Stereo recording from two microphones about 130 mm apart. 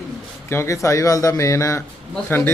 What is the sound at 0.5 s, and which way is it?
Speech, 20° left (ahead or behind).